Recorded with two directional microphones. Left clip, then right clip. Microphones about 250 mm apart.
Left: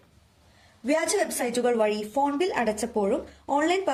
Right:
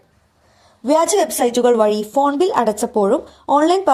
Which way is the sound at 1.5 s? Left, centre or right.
Right.